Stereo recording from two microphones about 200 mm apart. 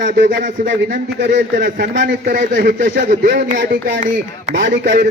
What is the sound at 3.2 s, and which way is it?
Speech, 45° right (ahead or behind).